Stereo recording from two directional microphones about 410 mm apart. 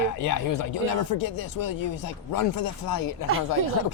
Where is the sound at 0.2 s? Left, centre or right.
Left.